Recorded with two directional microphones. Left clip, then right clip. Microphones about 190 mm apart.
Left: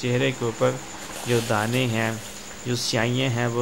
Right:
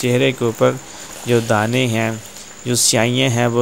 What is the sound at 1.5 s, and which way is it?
Speech, 35° right (ahead or behind).